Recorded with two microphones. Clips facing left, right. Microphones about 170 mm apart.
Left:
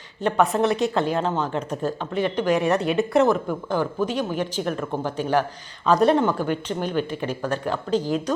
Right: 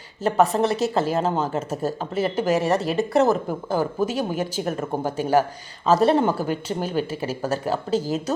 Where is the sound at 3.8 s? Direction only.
40° right (ahead or behind).